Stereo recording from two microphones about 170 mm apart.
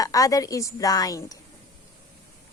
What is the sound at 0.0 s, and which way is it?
A woman's voice, 20° left (ahead or behind).